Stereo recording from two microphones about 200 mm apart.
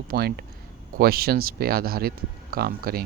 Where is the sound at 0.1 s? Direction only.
50° right (ahead or behind).